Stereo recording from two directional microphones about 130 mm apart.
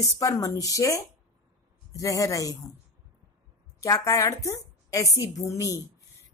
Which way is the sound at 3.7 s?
25° left (ahead or behind).